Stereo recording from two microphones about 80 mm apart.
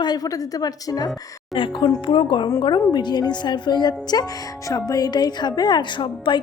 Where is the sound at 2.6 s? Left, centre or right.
Left.